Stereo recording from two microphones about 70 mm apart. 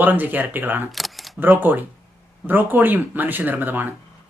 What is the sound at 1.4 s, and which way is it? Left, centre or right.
Speech, right.